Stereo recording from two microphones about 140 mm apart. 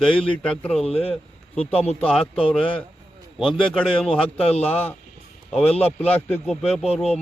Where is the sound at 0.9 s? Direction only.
45° left (ahead or behind).